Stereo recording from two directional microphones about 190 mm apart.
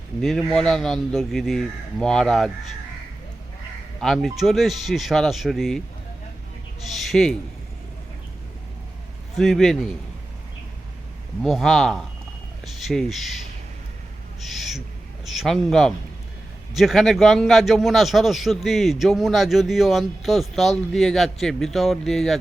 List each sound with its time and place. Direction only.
0.2 s a man's voice: centre (ahead or behind)
4.0 s a man's voice: centre (ahead or behind)
6.8 s a man's voice: centre (ahead or behind)
9.4 s a man's voice: centre (ahead or behind)
11.4 s a man's voice: centre (ahead or behind)
14.4 s owl: centre (ahead or behind)
15.2 s a man's voice: centre (ahead or behind)